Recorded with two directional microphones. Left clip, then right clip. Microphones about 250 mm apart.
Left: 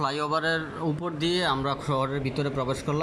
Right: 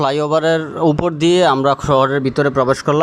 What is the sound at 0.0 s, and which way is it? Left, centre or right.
A man's voice, right.